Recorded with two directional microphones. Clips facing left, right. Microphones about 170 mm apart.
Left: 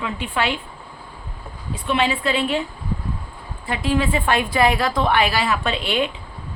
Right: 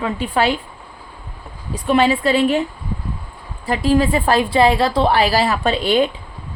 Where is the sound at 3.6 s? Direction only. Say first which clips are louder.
Right 5 dB; 40° right (ahead or behind).